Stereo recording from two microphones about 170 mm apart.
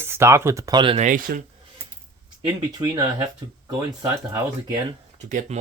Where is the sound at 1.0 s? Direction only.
50° right (ahead or behind).